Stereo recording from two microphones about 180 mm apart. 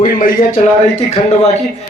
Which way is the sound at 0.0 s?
50° left (ahead or behind).